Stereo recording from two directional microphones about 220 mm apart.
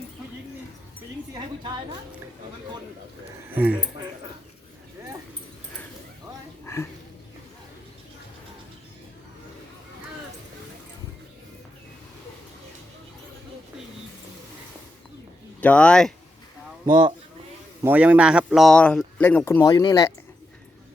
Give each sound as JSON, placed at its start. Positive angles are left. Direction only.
{"t": 1.3, "sound": "a sound", "side_deg": -20}
{"t": 3.5, "sound": "speech", "side_deg": -5}
{"t": 15.6, "sound": "a man's voice", "side_deg": 5}
{"t": 16.9, "sound": "speech", "side_deg": -20}
{"t": 17.8, "sound": "a man's voice", "side_deg": -5}